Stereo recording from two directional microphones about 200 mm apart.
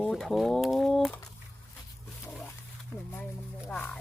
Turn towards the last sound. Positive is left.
turn(degrees=10)  # may be behind; listen again after turning